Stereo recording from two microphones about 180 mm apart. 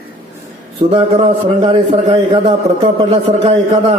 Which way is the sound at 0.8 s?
30° right (ahead or behind).